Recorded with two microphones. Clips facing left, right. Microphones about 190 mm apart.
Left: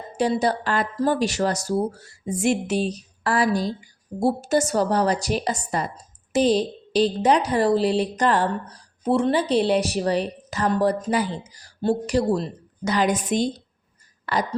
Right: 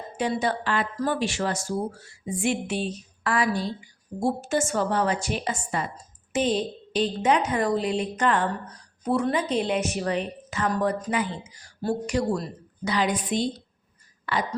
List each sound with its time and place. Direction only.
0.2 s a woman's voice: 35° left (ahead or behind)